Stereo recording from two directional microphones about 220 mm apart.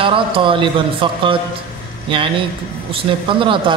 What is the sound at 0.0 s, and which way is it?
A man's voice, 25° right (ahead or behind).